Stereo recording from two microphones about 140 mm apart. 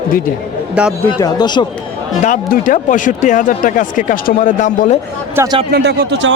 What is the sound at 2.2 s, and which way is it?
Speech, 70° left (ahead or behind).